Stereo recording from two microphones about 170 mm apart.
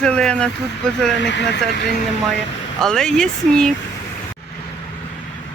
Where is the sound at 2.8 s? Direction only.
5° left (ahead or behind).